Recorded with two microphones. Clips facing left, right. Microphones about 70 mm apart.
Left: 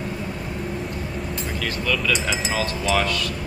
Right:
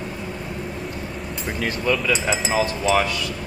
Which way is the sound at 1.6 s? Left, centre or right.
Right.